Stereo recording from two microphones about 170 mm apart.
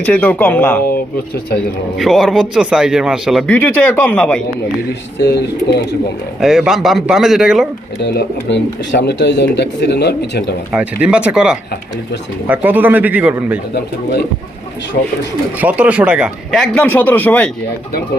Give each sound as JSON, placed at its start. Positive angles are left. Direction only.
{"t": 0.0, "sound": "speech", "side_deg": 10}
{"t": 0.9, "sound": "speech", "side_deg": 65}
{"t": 2.0, "sound": "speech", "side_deg": 0}
{"t": 6.4, "sound": "speech", "side_deg": 0}
{"t": 7.9, "sound": "speech", "side_deg": 90}
{"t": 10.7, "sound": "a man's voice", "side_deg": -5}
{"t": 15.5, "sound": "speech", "side_deg": -10}